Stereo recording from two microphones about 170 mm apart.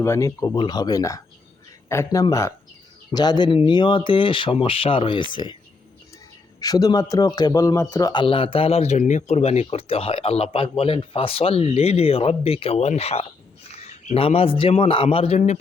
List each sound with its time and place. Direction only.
0.0 s speech: 15° left (ahead or behind)
6.6 s a man's voice: 25° left (ahead or behind); by 15.5 s 40° left (ahead or behind)